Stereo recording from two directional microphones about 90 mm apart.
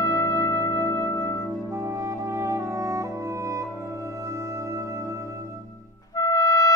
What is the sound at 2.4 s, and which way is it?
Brass instrument, 35° right (ahead or behind).